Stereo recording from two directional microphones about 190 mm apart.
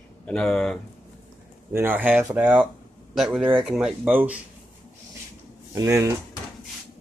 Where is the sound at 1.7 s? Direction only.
10° right (ahead or behind).